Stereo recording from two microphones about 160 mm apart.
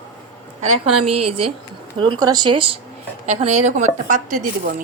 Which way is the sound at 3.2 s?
45° right (ahead or behind).